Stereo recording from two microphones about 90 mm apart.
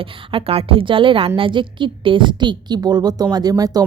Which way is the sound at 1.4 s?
65° right (ahead or behind).